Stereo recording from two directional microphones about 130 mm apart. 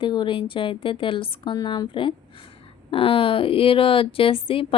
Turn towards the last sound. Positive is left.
turn(degrees=45)  # may be behind; listen again after turning